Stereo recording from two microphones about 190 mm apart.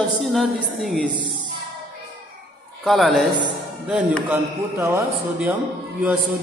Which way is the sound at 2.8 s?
Centre (ahead or behind).